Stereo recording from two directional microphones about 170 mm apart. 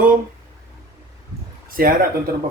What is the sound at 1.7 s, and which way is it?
Speech, 55° right (ahead or behind).